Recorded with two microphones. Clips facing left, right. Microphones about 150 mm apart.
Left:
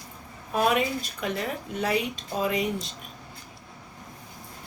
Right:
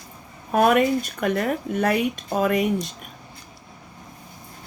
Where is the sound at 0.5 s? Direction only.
55° right (ahead or behind).